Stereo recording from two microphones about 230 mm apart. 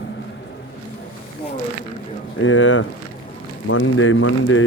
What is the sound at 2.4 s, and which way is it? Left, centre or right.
Speech, left.